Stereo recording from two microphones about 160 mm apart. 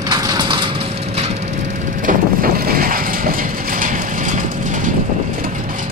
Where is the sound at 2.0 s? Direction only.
65° right (ahead or behind).